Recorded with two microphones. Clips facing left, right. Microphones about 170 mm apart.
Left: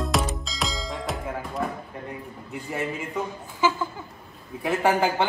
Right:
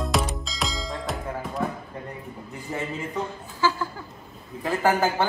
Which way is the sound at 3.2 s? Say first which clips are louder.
Left 1 dB; 20° left (ahead or behind).